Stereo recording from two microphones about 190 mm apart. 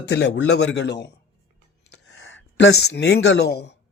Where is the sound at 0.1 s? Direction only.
65° left (ahead or behind).